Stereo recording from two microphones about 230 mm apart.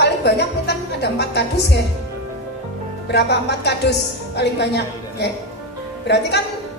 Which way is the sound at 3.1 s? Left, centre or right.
Left.